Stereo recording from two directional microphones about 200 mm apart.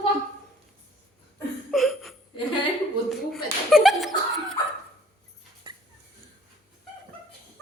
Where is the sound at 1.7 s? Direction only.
Centre (ahead or behind).